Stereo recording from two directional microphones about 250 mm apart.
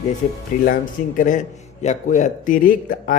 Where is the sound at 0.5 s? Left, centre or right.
Left.